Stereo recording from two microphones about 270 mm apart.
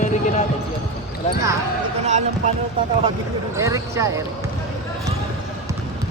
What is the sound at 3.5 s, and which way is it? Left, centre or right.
Speech, centre.